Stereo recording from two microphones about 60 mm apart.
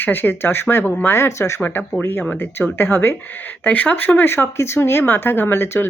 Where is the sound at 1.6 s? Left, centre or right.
Left.